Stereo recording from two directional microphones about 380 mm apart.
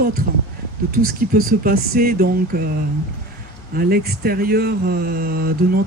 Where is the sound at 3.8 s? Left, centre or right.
Right.